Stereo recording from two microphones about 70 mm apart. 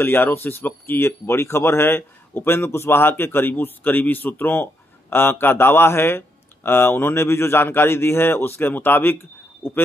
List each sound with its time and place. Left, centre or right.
0.0 s a man's voice: left